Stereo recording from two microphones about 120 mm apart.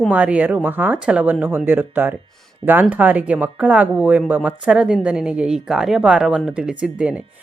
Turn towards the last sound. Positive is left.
turn(degrees=-10)  # may be behind; listen again after turning